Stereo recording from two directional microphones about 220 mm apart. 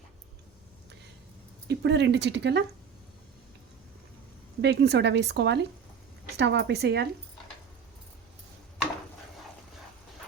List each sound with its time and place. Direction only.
1.6 s speech: 50° right (ahead or behind)
4.6 s speech: 50° right (ahead or behind)